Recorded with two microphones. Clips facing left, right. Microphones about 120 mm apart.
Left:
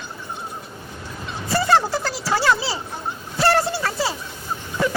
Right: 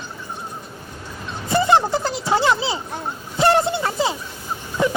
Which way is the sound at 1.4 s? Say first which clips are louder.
Right 2 dB; 20° right (ahead or behind).